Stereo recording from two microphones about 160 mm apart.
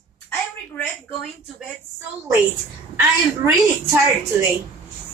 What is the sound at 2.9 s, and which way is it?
A woman's voice, 20° right (ahead or behind).